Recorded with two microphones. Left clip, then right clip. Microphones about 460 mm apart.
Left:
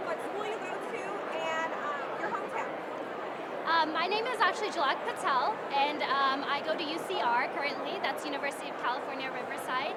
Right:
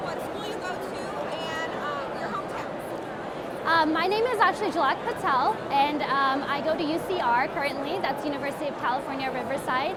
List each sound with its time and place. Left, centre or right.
3.7 s a woman's voice: right
9.6 s a woman's voice: right